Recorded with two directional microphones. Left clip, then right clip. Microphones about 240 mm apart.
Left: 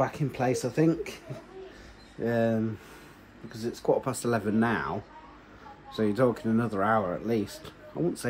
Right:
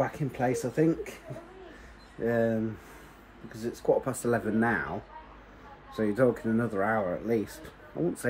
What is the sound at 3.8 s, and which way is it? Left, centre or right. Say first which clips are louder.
Speech: even; centre.